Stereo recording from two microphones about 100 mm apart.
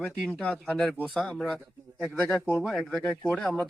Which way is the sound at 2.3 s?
25° left (ahead or behind).